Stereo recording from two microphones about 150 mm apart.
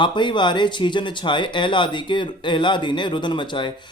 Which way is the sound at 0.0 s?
30° left (ahead or behind).